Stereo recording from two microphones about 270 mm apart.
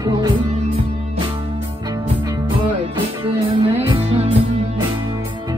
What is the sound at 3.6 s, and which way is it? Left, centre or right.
Music, right.